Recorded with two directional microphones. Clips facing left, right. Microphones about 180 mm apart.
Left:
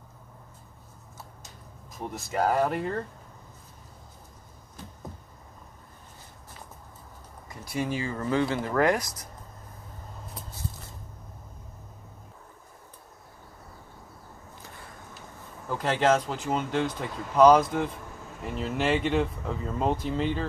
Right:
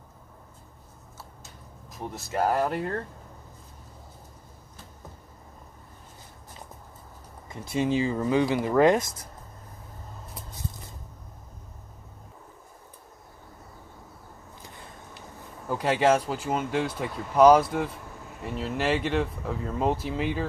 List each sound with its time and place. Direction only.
1.9 s speech: centre (ahead or behind)
7.4 s speech: 25° right (ahead or behind)
15.7 s speech: 15° right (ahead or behind)